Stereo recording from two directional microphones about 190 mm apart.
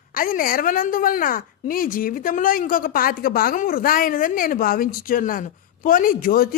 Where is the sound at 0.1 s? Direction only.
50° left (ahead or behind).